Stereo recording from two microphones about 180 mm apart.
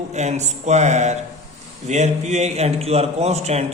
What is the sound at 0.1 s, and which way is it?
Speech, 40° right (ahead or behind).